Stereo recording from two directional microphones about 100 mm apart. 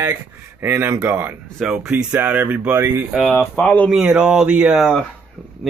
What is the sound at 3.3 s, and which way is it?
Speech, 15° left (ahead or behind).